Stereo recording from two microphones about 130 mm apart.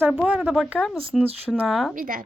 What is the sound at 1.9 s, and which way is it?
Speech, 90° right.